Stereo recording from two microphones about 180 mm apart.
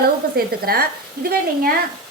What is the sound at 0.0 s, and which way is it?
A woman's voice, 55° right (ahead or behind).